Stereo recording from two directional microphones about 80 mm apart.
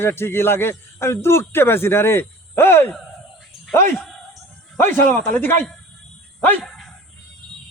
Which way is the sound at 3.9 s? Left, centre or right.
Centre.